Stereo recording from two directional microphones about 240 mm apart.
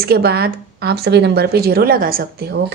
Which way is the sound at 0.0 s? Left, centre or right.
Right.